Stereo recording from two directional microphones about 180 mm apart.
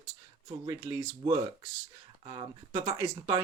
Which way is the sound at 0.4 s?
25° right (ahead or behind).